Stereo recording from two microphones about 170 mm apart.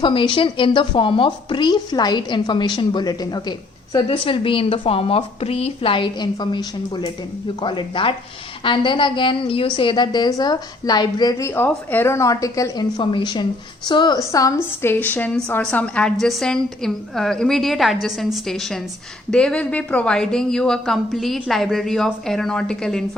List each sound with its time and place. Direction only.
0.0 s a woman's voice: 30° left (ahead or behind); by 23.0 s 5° left (ahead or behind)